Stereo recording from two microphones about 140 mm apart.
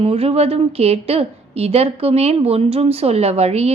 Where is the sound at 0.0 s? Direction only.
45° right (ahead or behind).